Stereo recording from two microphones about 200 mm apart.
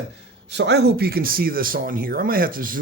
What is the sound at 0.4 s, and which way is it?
Speech, 60° right (ahead or behind).